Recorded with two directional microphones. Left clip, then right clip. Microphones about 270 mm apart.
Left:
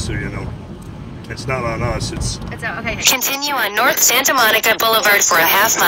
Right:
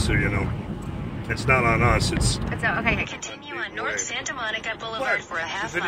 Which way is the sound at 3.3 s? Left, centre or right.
Left.